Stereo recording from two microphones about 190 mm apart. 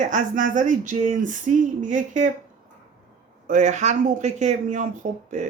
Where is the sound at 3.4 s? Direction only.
40° right (ahead or behind).